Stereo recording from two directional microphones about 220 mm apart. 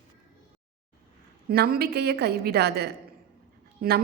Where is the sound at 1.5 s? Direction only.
45° right (ahead or behind).